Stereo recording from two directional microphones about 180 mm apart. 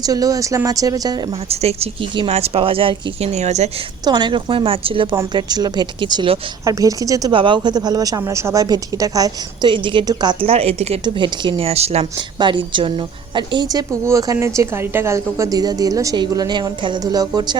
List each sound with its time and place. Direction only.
0.0 s a woman's voice: 20° right (ahead or behind)
1.3 s speech: 35° right (ahead or behind)
4.0 s a woman's voice: 25° right (ahead or behind)
5.1 s a woman's voice: 20° right (ahead or behind)